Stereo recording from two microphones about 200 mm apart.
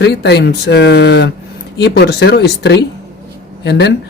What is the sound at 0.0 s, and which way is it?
A woman's voice, 55° left (ahead or behind).